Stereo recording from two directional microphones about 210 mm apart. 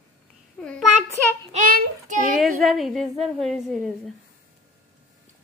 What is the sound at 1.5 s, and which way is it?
Child singing, 40° right (ahead or behind).